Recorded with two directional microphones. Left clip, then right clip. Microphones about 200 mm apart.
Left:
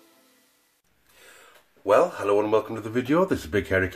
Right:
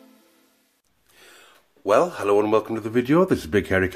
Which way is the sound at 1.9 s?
40° right (ahead or behind).